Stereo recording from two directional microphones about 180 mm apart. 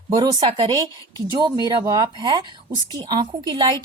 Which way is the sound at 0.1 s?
25° right (ahead or behind).